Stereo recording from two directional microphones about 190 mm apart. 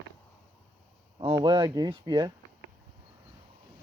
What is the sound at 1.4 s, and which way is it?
Speech, 25° right (ahead or behind).